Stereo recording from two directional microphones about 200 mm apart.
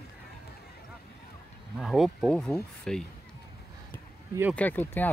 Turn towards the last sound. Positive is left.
turn(degrees=10)  # may be behind; listen again after turning